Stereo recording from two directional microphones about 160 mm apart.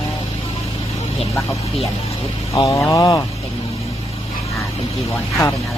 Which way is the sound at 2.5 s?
20° left (ahead or behind).